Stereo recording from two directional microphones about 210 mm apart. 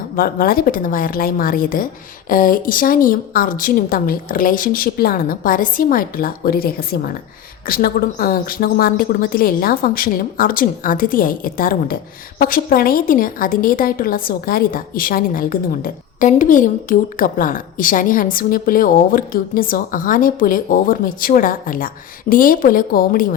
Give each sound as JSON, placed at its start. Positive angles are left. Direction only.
{"t": 0.2, "sound": "a woman's voice", "side_deg": 45}